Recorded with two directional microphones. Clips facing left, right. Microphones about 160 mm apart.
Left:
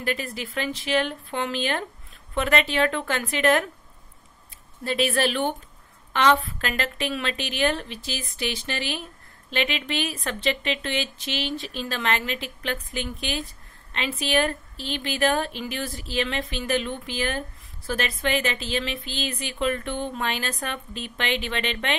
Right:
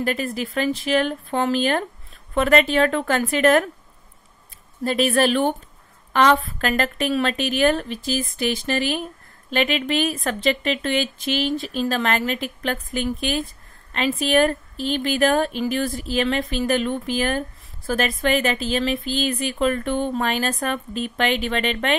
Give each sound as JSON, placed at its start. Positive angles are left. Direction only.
{"t": 0.0, "sound": "a woman's voice", "side_deg": -40}
{"t": 4.8, "sound": "a woman's voice", "side_deg": -45}